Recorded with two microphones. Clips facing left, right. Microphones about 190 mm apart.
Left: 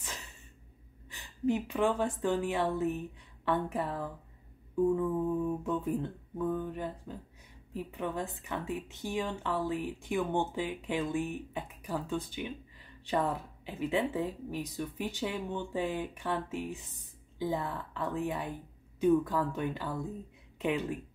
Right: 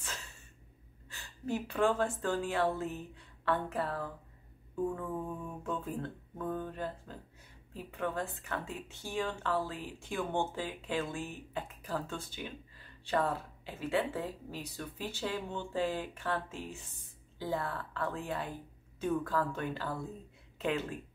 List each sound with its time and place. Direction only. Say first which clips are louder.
1.0 s a woman's voice: left 10 dB; 20° left (ahead or behind)
5.6 s speech: left 5 dB; 15° left (ahead or behind)